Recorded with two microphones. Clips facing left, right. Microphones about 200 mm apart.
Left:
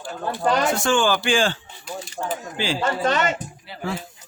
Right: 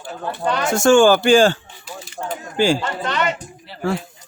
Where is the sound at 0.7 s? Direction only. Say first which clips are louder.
Right 8 dB; 45° right (ahead or behind).